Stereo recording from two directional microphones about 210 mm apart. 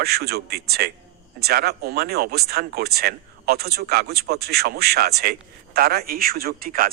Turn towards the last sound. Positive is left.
turn(degrees=-45)  # may be behind; listen again after turning